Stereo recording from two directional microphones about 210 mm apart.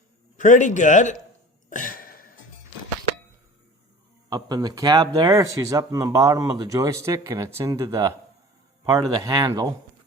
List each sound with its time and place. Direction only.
0.3 s speech: 35° left (ahead or behind)
1.7 s a sound: 40° left (ahead or behind)
4.3 s speech: 20° right (ahead or behind)